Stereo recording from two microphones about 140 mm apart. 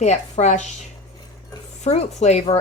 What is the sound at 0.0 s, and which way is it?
Speech, 55° left (ahead or behind).